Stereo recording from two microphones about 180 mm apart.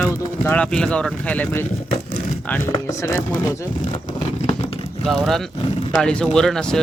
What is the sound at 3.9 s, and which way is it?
Vehicle, 30° left (ahead or behind).